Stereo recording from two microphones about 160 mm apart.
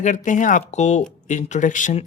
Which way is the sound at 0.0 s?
50° left (ahead or behind).